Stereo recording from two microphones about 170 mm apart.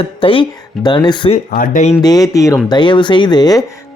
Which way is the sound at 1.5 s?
50° left (ahead or behind).